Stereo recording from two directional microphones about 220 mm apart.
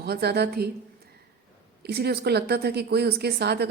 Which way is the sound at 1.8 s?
45° right (ahead or behind).